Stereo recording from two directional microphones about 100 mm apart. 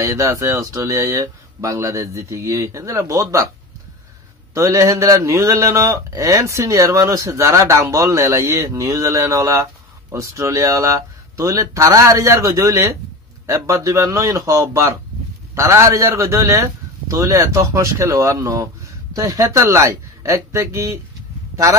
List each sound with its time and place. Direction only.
0.0 s speech: 35° right (ahead or behind)
4.6 s speech: 30° right (ahead or behind)